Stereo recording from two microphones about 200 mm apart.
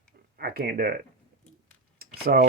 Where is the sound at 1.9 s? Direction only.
50° right (ahead or behind).